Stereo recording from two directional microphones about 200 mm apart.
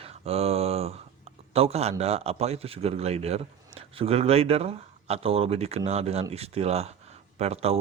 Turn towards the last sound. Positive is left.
turn(degrees=-30)  # may be behind; listen again after turning